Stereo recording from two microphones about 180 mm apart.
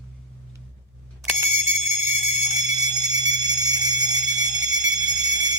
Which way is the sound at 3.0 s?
20° right (ahead or behind).